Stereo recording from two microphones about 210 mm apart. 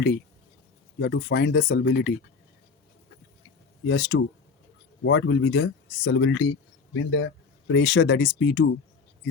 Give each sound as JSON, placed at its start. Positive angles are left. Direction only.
{"t": 0.9, "sound": "speech", "side_deg": 55}
{"t": 3.8, "sound": "speech", "side_deg": 50}
{"t": 5.0, "sound": "speech", "side_deg": 60}
{"t": 7.7, "sound": "speech", "side_deg": 55}